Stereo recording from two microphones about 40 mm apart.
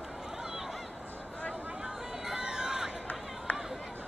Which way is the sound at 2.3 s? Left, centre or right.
Centre.